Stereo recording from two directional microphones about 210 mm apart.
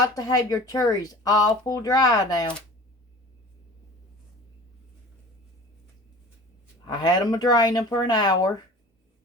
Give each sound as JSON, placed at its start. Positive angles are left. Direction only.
{"t": 0.0, "sound": "speech", "side_deg": 15}
{"t": 6.8, "sound": "speech", "side_deg": 20}